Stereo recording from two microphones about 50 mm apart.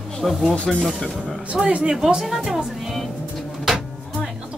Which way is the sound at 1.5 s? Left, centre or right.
Right.